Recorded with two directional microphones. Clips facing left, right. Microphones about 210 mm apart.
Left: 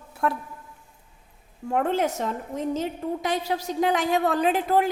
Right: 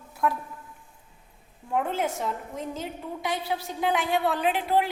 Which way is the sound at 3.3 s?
40° left (ahead or behind).